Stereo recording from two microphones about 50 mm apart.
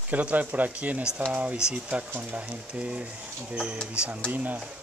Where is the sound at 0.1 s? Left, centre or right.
Right.